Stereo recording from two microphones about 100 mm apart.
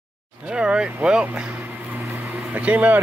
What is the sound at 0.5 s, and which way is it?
Speech, 10° right (ahead or behind).